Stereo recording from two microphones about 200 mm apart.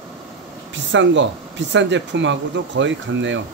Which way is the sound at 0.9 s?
65° right (ahead or behind).